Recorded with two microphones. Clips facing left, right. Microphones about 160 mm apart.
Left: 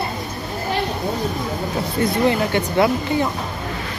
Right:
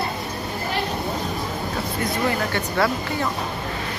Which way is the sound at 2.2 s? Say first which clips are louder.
Left 5 dB; 20° left (ahead or behind).